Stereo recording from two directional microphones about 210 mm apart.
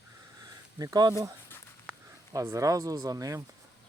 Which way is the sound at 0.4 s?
20° right (ahead or behind).